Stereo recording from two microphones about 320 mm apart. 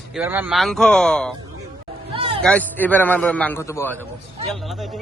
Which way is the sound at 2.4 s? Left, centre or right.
Centre.